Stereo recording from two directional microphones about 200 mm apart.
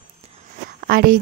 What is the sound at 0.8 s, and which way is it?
Speech, 50° right (ahead or behind).